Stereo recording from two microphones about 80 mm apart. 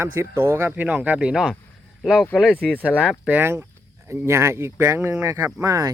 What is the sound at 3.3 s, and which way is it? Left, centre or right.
Speech, right.